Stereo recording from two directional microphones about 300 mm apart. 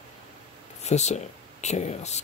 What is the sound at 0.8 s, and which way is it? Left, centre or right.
Speech, left.